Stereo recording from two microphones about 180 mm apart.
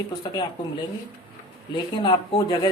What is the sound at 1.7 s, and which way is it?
Speech, 25° left (ahead or behind).